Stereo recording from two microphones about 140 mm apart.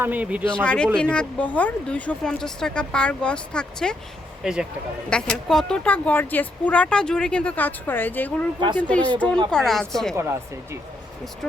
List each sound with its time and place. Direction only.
0.0 s a man's voice: 10° right (ahead or behind)
0.4 s speech: 10° left (ahead or behind)
4.4 s a woman's voice: 5° right (ahead or behind)
5.0 s a woman's voice: 5° left (ahead or behind)
10.2 s speech: 20° right (ahead or behind)